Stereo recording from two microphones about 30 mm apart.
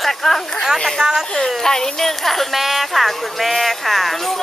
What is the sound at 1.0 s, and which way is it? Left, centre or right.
Speech, centre.